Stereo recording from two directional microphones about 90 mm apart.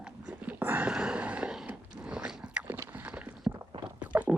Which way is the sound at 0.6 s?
20° right (ahead or behind).